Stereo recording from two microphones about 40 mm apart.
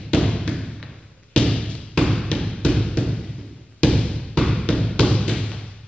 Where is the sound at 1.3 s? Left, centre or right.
Left.